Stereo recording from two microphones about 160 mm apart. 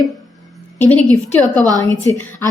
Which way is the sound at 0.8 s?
10° left (ahead or behind).